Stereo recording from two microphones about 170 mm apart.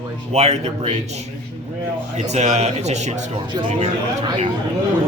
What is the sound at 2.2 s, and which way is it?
Speech, 40° right (ahead or behind).